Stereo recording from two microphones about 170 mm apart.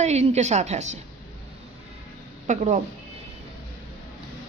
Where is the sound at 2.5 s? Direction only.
45° right (ahead or behind).